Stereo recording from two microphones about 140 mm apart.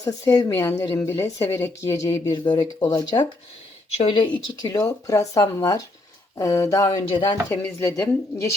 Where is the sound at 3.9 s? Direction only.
50° left (ahead or behind).